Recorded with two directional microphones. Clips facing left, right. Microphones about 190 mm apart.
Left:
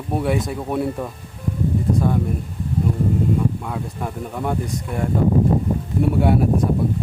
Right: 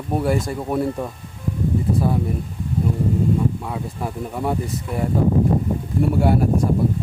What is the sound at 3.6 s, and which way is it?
Speech, 5° right (ahead or behind).